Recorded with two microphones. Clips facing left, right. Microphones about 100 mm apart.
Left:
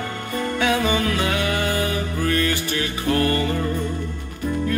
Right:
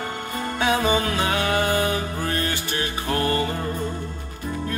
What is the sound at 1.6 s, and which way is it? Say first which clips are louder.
Music: right 1 dB; 25° right (ahead or behind).